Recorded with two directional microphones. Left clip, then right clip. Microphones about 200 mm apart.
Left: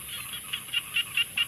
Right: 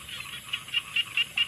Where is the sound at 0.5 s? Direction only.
15° left (ahead or behind).